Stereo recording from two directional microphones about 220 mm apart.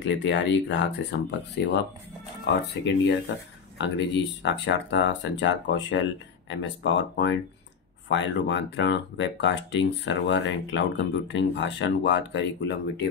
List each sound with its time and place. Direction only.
0.0 s speech: 55° left (ahead or behind)